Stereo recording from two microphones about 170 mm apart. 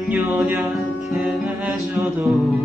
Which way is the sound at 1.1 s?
5° right (ahead or behind).